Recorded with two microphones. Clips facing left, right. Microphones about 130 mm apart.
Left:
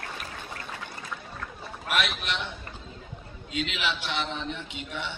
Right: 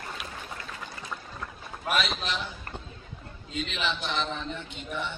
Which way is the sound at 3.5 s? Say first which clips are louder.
Left 1 dB; 75° left (ahead or behind).